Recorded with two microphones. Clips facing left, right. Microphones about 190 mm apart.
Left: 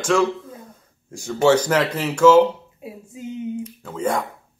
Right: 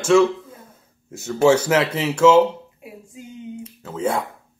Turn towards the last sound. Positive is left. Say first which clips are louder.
# even
turn(degrees=-5)  # may be behind; listen again after turning